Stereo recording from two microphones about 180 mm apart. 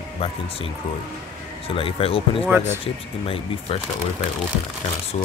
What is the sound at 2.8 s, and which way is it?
Speech, 30° left (ahead or behind).